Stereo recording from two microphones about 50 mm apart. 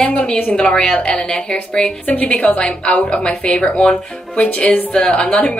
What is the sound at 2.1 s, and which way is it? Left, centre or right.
A woman's voice, left.